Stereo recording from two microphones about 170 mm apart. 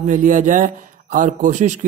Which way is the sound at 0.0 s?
50° right (ahead or behind).